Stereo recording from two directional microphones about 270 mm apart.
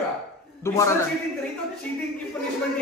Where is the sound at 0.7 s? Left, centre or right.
Centre.